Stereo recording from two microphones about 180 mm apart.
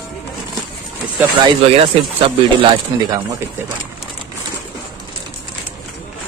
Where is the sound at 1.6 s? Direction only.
30° right (ahead or behind).